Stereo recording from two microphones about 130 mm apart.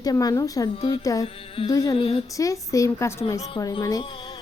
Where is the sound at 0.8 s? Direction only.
45° left (ahead or behind).